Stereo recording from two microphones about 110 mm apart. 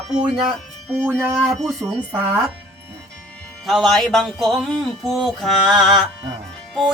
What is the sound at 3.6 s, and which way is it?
Music, centre (ahead or behind).